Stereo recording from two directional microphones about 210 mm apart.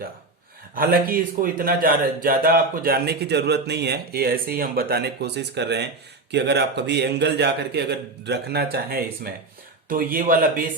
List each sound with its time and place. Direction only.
0.8 s a man's voice: 45° right (ahead or behind)